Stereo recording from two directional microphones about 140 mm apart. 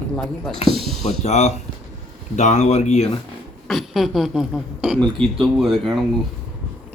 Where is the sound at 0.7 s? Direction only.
Centre (ahead or behind).